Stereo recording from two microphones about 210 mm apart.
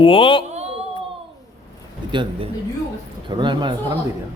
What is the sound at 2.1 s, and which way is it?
Speech, 20° right (ahead or behind).